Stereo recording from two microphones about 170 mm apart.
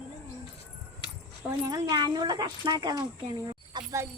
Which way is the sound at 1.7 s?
20° right (ahead or behind).